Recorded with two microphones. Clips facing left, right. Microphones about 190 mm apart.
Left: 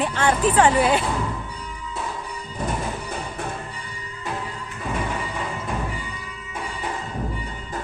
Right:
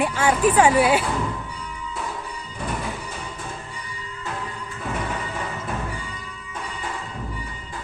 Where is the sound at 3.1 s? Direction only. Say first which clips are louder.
Left 4 dB; 60° left (ahead or behind).